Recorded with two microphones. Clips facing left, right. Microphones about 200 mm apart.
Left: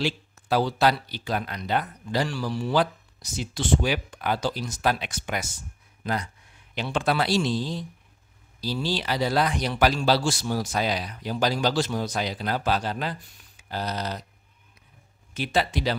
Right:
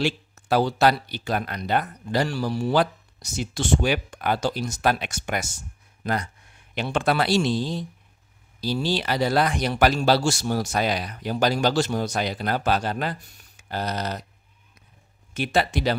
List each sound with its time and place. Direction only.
0.0 s speech: 50° right (ahead or behind)
3.5 s speech: 50° right (ahead or behind)
4.6 s a man's voice: 65° right (ahead or behind)
6.7 s a man's voice: 55° right (ahead or behind)
8.8 s a man's voice: 55° right (ahead or behind)
15.3 s a man's voice: 55° right (ahead or behind)